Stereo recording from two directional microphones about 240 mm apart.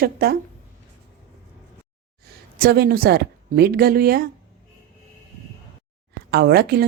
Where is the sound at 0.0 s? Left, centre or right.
Right.